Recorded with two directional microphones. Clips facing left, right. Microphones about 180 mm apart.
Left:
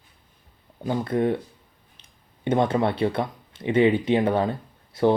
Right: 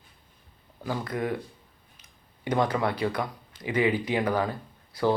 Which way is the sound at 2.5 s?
25° left (ahead or behind).